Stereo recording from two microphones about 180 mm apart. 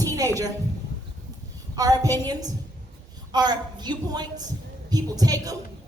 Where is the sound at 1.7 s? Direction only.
20° right (ahead or behind).